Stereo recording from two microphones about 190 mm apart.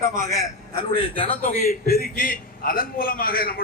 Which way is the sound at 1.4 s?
45° left (ahead or behind).